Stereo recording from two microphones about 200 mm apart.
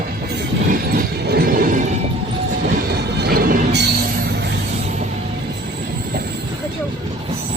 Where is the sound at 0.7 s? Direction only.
50° right (ahead or behind).